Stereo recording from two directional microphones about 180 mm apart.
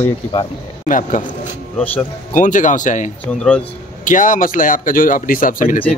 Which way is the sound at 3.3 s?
5° left (ahead or behind).